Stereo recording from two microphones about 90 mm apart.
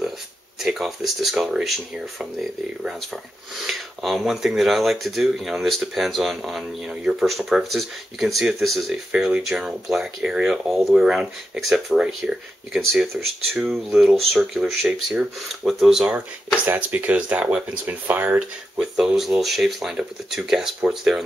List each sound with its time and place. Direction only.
0.6 s speech: 5° right (ahead or behind)
3.5 s speech: centre (ahead or behind)
16.6 s speech: 15° right (ahead or behind)
18.8 s speech: 5° right (ahead or behind)